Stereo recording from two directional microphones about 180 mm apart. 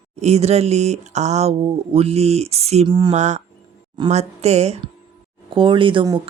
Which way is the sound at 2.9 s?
25° right (ahead or behind).